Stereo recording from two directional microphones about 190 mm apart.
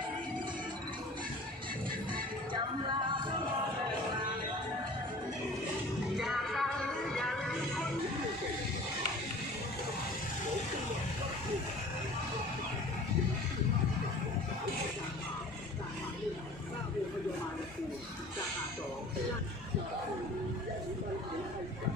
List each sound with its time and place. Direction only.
2.5 s music: 25° right (ahead or behind)
6.1 s music: centre (ahead or behind)